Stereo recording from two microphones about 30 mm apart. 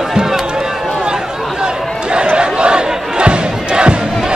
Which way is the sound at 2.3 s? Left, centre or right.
Right.